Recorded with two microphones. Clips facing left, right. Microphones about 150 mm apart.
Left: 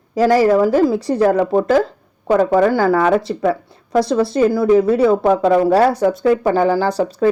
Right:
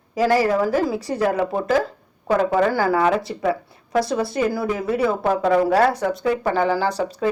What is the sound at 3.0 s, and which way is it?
Speech, 25° left (ahead or behind).